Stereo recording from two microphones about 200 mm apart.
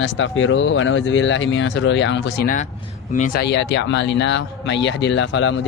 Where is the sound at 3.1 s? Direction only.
45° left (ahead or behind).